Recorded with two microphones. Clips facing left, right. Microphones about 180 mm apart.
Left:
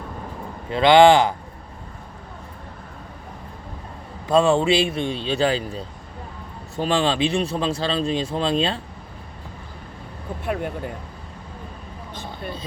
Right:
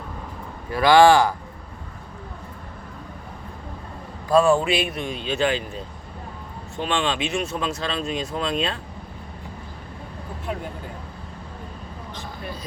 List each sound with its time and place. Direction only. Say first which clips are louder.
0.7 s speech: left 1 dB; 20° left (ahead or behind)
4.3 s speech: left 1 dB; 25° left (ahead or behind)
10.4 s speech: left 5 dB; 65° left (ahead or behind)